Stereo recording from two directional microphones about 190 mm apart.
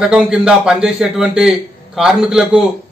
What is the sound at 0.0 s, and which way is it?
A man's voice, 5° right (ahead or behind).